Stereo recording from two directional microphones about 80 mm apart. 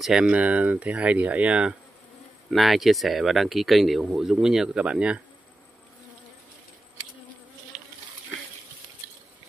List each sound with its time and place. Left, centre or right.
0.0 s speech: centre
2.5 s speech: centre